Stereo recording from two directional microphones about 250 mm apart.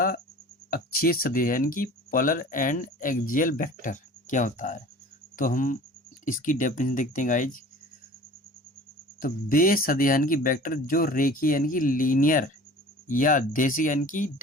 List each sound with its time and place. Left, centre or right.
0.7 s speech: left
9.2 s speech: left